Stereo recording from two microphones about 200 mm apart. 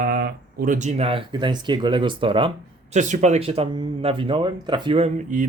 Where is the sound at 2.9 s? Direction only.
35° right (ahead or behind).